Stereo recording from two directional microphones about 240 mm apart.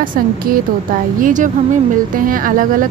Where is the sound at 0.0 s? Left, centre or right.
Right.